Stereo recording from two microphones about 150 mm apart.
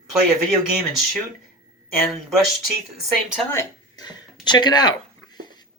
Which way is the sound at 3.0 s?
5° right (ahead or behind).